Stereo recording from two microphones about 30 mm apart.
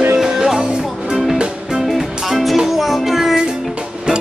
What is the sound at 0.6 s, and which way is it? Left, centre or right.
Music, right.